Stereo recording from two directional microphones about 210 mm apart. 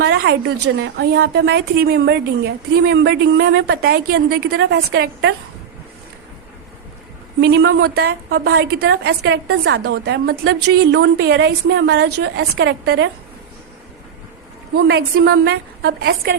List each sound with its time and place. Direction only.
0.0 s a woman's voice: 55° right (ahead or behind)
7.4 s a woman's voice: 50° right (ahead or behind)
14.8 s a woman's voice: 50° right (ahead or behind)